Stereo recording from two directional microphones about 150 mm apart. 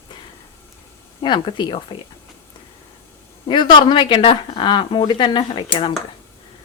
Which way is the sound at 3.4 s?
30° left (ahead or behind).